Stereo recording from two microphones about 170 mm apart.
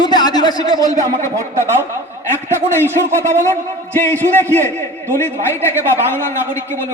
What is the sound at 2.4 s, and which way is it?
Speech, 15° left (ahead or behind).